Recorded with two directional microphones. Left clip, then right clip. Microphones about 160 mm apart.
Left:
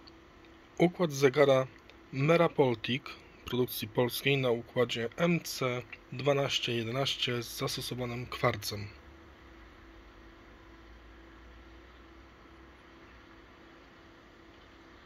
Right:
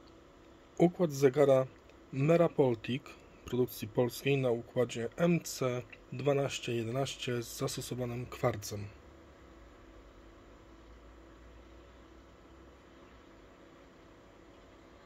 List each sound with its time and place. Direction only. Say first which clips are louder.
0.7 s speech: left 1 dB; 15° right (ahead or behind)